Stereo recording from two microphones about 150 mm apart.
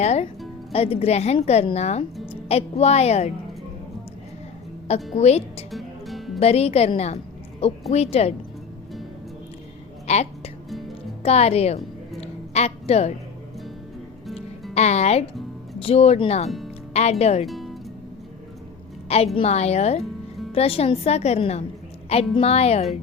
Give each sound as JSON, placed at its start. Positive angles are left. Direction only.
{"t": 0.0, "sound": "a woman's voice", "side_deg": 45}
{"t": 5.1, "sound": "a woman's voice", "side_deg": 45}
{"t": 5.7, "sound": "music", "side_deg": 0}
{"t": 6.4, "sound": "a woman's voice", "side_deg": 40}
{"t": 10.1, "sound": "music", "side_deg": 45}
{"t": 10.7, "sound": "music", "side_deg": 0}
{"t": 11.2, "sound": "a woman's voice", "side_deg": 45}
{"t": 12.2, "sound": "music", "side_deg": 45}
{"t": 14.8, "sound": "a woman's voice", "side_deg": 50}
{"t": 17.4, "sound": "music", "side_deg": 0}
{"t": 19.0, "sound": "a woman's voice", "side_deg": 40}